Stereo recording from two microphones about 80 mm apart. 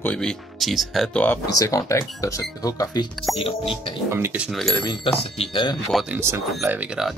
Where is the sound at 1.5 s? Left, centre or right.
Left.